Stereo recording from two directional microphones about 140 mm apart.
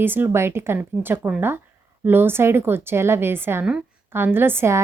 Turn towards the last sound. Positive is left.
turn(degrees=-20)  # may be behind; listen again after turning